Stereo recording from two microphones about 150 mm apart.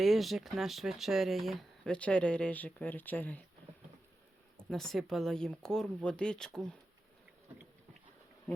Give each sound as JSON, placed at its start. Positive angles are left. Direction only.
{"t": 0.0, "sound": "speech", "side_deg": 0}
{"t": 4.7, "sound": "speech", "side_deg": 0}